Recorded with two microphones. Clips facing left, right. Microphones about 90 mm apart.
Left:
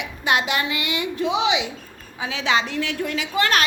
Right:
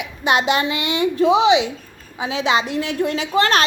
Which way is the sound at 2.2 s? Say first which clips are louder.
Right 3 dB; 20° right (ahead or behind).